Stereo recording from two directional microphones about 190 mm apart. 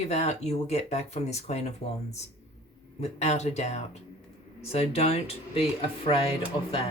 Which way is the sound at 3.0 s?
35° left (ahead or behind).